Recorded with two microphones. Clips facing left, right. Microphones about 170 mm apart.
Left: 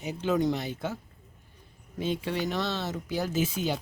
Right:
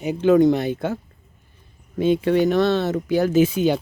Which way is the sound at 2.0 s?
60° right (ahead or behind).